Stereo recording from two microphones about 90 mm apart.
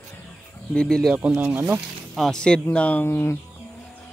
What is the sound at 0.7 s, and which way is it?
Speech, 5° left (ahead or behind).